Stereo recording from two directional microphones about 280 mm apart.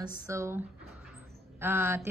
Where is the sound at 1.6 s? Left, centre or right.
Centre.